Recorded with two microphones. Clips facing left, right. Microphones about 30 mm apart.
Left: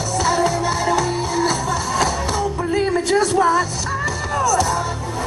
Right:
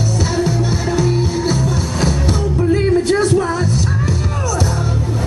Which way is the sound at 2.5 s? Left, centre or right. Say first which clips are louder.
Right 4 dB; centre.